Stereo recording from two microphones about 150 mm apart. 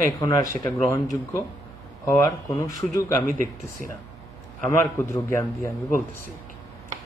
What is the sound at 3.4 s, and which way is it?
Speech, 65° right (ahead or behind).